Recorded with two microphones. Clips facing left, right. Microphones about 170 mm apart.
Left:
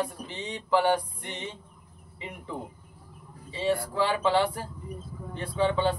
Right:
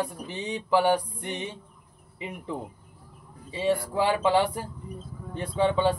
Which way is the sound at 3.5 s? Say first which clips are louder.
Right 2 dB; 15° right (ahead or behind).